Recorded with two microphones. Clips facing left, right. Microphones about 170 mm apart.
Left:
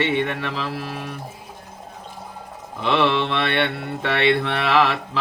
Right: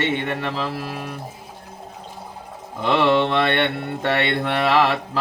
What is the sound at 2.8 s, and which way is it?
Mantra, 45° right (ahead or behind).